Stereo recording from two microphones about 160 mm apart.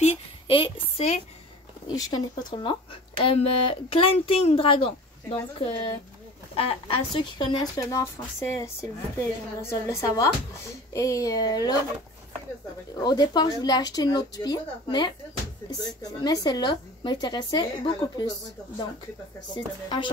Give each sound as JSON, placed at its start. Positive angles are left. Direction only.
{"t": 0.0, "sound": "a sound", "side_deg": 35}
{"t": 2.0, "sound": "a woman's voice", "side_deg": 25}
{"t": 12.9, "sound": "a woman's voice", "side_deg": 25}
{"t": 19.5, "sound": "a woman's voice", "side_deg": 30}